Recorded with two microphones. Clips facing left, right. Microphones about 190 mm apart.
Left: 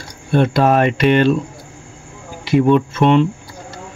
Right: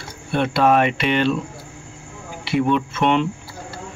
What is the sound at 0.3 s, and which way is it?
Speech, 40° left (ahead or behind).